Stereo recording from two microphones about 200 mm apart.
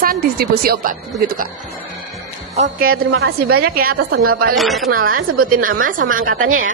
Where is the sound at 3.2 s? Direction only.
50° right (ahead or behind).